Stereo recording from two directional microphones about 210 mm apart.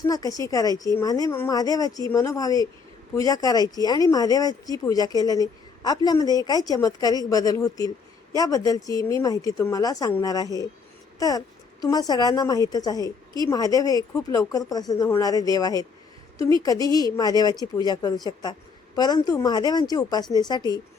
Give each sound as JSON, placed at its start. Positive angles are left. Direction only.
{"t": 0.1, "sound": "a woman's voice", "side_deg": 15}